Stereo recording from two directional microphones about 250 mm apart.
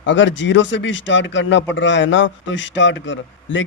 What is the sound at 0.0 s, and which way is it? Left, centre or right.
Speech, left.